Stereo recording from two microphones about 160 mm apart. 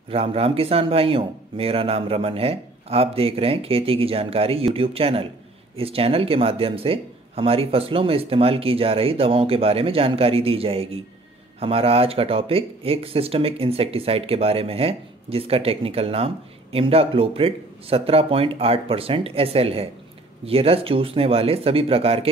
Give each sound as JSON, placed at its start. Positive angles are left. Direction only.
{"t": 0.1, "sound": "speech", "side_deg": -35}